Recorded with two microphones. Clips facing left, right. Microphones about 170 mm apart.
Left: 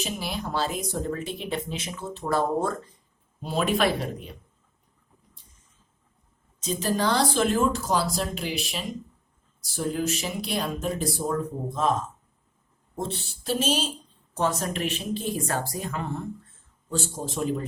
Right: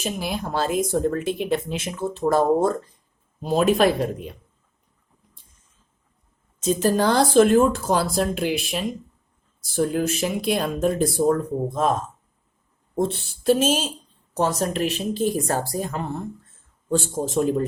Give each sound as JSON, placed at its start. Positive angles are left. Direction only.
{"t": 0.0, "sound": "speech", "side_deg": -50}
{"t": 6.8, "sound": "speech", "side_deg": -50}
{"t": 13.0, "sound": "speech", "side_deg": -50}
{"t": 14.3, "sound": "a woman's voice", "side_deg": -40}